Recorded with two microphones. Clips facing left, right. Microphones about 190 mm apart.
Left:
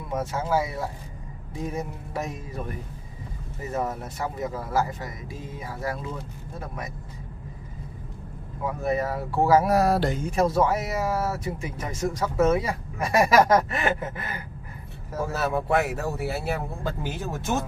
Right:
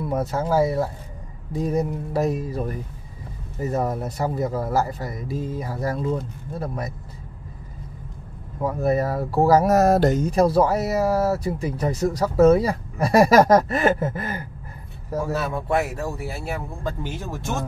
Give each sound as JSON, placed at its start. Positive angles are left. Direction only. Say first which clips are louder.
{"t": 0.1, "sound": "speech", "louder": "right 3 dB", "side_deg": -35}
{"t": 8.6, "sound": "speech", "louder": "right 5 dB", "side_deg": -40}
{"t": 15.7, "sound": "speech", "louder": "right 1 dB", "side_deg": 5}